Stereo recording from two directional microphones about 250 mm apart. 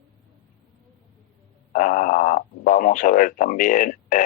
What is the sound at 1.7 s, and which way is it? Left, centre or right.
Speech, left.